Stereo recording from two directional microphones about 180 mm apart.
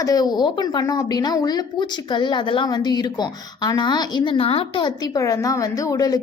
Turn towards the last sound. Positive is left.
turn(degrees=20)  # may be behind; listen again after turning